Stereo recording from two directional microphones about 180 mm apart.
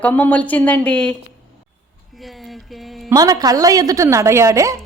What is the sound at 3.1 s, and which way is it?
A woman's voice, 20° right (ahead or behind).